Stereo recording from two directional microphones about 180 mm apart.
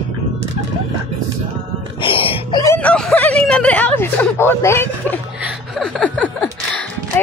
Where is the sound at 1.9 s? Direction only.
30° left (ahead or behind).